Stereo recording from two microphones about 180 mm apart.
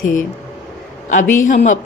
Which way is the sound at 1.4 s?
45° left (ahead or behind).